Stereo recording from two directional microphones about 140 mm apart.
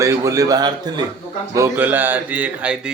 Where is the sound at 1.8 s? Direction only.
15° right (ahead or behind).